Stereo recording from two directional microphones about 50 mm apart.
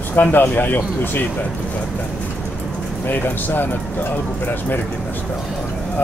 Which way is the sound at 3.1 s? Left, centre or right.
Left.